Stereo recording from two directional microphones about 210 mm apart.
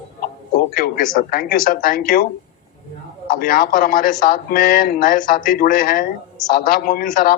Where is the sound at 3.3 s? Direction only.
40° left (ahead or behind).